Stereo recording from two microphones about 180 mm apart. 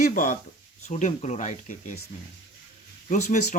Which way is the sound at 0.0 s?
45° left (ahead or behind).